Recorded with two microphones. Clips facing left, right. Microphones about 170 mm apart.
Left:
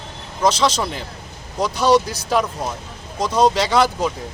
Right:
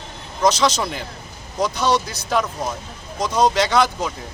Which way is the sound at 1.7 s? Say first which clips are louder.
Left 6 dB; 35° left (ahead or behind).